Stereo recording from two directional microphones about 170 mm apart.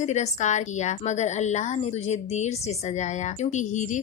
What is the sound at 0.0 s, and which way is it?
Speech, 40° left (ahead or behind).